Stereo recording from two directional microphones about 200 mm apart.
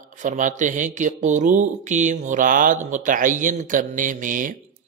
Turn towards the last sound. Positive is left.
turn(degrees=-40)  # may be behind; listen again after turning